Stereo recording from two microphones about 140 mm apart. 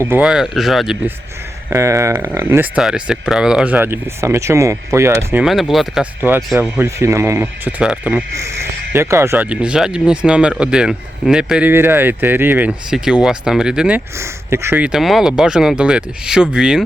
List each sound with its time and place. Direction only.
0.0 s speech: 15° right (ahead or behind)
0.3 s speech: 5° right (ahead or behind)
1.7 s speech: 20° right (ahead or behind)
2.7 s speech: 5° right (ahead or behind)
5.4 s speech: centre (ahead or behind)
6.6 s speech: 15° right (ahead or behind)
8.9 s speech: 20° right (ahead or behind)
14.2 s speech: 20° right (ahead or behind)